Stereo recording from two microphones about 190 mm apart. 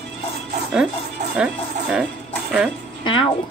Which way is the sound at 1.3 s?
5° right (ahead or behind).